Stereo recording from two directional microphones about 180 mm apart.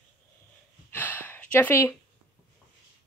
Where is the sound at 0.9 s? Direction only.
10° left (ahead or behind).